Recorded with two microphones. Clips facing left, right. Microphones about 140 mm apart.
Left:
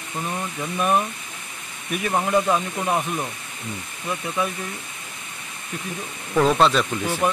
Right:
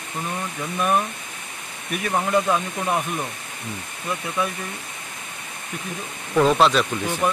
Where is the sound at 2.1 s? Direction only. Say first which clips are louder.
Even; 5° left (ahead or behind).